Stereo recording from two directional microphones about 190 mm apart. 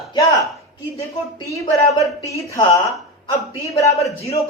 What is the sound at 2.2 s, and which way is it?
Speech, 15° left (ahead or behind).